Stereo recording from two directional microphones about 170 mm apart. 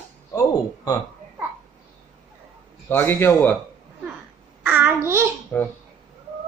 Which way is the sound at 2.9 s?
15° left (ahead or behind).